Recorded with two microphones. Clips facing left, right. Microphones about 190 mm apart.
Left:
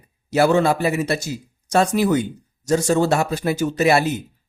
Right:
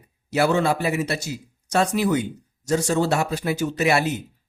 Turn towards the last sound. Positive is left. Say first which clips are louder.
# left 4 dB
turn(degrees=40)  # may be behind; listen again after turning